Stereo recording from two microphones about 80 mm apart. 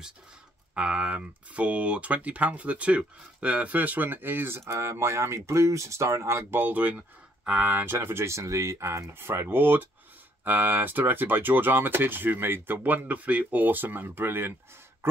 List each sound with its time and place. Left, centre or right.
0.7 s speech: centre; by 14.5 s right